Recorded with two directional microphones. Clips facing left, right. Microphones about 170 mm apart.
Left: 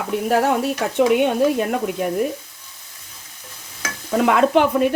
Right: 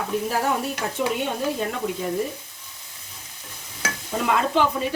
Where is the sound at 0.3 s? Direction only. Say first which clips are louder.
Left 6 dB; 65° left (ahead or behind).